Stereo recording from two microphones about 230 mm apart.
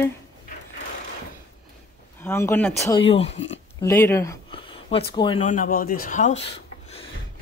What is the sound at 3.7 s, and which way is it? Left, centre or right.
Speech, centre.